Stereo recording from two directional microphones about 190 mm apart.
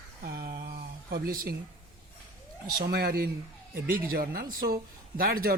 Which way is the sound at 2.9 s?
55° right (ahead or behind).